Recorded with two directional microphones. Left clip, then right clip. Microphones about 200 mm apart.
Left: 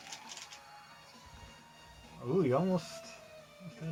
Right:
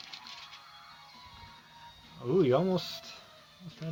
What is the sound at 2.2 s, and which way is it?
Speech, 45° right (ahead or behind).